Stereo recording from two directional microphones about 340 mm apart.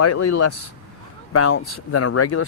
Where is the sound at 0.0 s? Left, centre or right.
Left.